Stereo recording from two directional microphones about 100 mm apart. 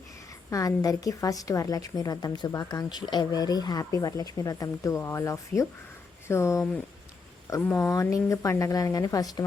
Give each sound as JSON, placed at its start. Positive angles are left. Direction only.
{"t": 0.5, "sound": "a woman's voice", "side_deg": 35}
{"t": 7.8, "sound": "a woman's voice", "side_deg": 30}